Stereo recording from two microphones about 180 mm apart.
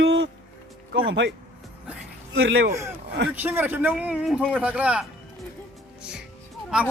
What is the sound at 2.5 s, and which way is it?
Speech, 75° right (ahead or behind).